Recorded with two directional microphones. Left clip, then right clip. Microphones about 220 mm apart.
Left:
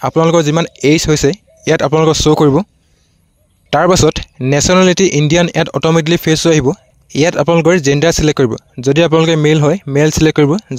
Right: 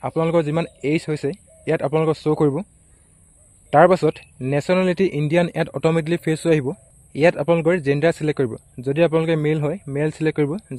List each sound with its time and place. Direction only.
0.0 s speech: 45° left (ahead or behind)
3.7 s speech: 45° left (ahead or behind)